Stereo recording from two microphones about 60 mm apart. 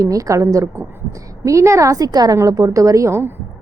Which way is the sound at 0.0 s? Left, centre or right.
Right.